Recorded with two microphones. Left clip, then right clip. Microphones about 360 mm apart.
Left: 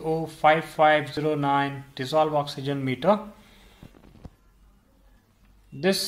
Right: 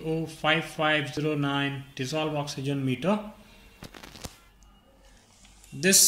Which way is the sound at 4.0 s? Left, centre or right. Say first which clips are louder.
Right 9 dB; right.